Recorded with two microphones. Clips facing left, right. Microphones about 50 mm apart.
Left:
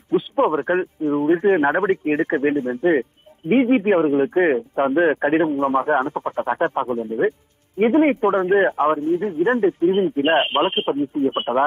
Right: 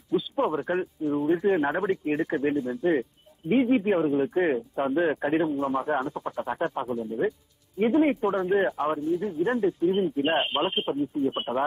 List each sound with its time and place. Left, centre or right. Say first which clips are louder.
0.1 s speech: left 7 dB; left